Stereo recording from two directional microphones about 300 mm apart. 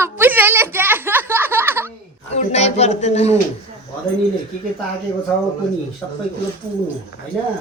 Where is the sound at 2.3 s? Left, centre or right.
Left.